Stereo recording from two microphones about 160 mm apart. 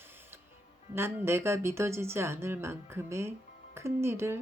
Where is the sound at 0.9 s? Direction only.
15° right (ahead or behind).